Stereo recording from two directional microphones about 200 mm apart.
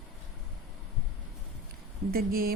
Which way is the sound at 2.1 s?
50° right (ahead or behind).